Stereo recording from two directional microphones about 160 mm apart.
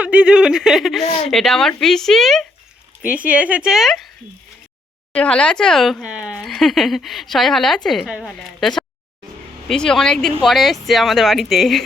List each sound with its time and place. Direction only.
0.0 s speech: 10° right (ahead or behind)
1.0 s speech: 40° left (ahead or behind)
1.3 s speech: centre (ahead or behind)
5.1 s speech: 5° left (ahead or behind)